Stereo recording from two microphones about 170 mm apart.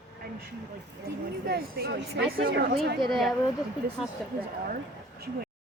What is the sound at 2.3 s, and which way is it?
Speech, 65° right (ahead or behind).